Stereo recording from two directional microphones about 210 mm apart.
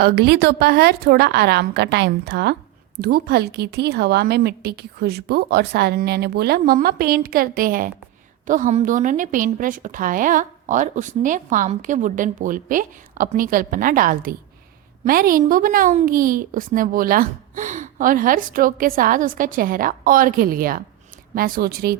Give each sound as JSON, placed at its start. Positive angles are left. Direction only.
{"t": 0.0, "sound": "a woman's voice", "side_deg": -50}